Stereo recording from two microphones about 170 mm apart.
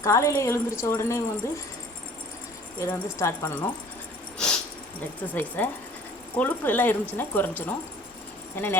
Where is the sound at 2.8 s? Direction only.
15° left (ahead or behind).